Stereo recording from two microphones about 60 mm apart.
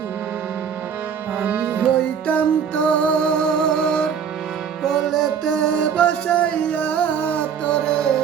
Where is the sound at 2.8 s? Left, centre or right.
Left.